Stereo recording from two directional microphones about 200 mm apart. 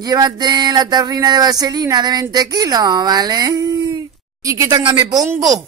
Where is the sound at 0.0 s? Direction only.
20° right (ahead or behind).